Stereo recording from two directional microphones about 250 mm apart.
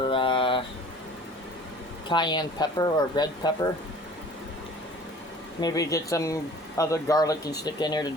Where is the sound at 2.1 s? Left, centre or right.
Centre.